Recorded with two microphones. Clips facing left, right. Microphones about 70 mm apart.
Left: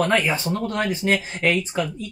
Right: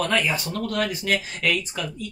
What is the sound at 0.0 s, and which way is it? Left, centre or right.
Speech, left.